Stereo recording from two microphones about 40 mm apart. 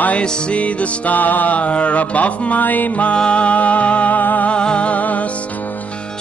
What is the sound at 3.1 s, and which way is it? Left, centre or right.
Music, left.